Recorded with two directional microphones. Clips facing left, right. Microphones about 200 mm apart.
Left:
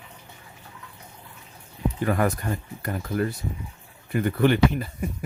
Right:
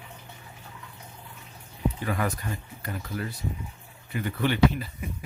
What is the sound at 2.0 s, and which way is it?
Speech, 50° left (ahead or behind).